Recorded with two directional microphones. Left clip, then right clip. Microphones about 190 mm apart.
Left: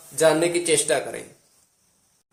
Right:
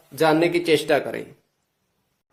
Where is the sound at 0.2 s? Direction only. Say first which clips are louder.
Even; 45° right (ahead or behind).